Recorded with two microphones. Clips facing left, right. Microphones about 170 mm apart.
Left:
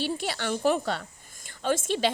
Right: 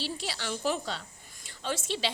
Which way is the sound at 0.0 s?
55° left (ahead or behind).